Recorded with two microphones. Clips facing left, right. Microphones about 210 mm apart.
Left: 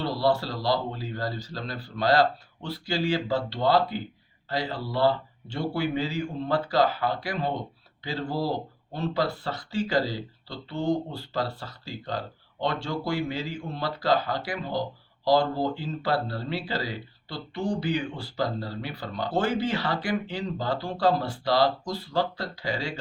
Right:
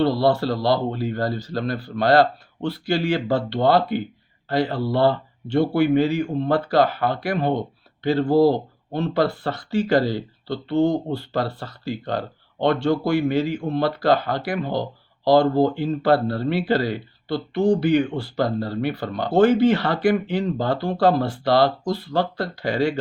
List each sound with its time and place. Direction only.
0.0 s speech: 60° right (ahead or behind)